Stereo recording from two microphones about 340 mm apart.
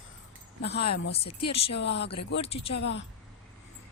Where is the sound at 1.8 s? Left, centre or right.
Left.